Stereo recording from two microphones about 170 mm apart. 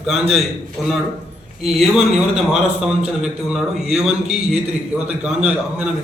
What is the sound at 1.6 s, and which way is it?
Speech, centre (ahead or behind).